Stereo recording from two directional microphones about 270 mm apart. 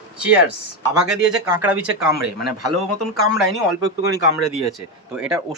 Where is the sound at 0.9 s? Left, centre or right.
Centre.